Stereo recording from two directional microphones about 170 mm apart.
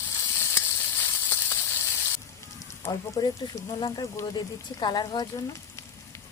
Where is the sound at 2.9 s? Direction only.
20° left (ahead or behind).